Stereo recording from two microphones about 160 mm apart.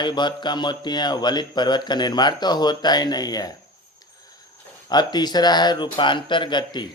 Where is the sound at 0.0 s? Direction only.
30° left (ahead or behind).